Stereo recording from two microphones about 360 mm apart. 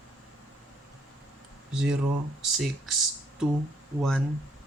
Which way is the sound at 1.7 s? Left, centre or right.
Centre.